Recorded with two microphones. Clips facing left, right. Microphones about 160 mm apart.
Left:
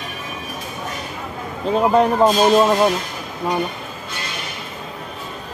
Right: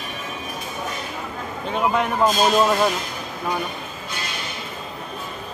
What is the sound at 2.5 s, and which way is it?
Speech, 20° left (ahead or behind).